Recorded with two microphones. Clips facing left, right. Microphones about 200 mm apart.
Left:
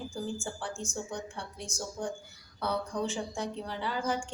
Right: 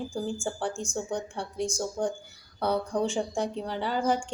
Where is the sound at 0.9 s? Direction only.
30° right (ahead or behind).